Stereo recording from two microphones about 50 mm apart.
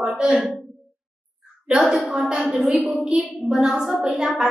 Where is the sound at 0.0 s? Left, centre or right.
Centre.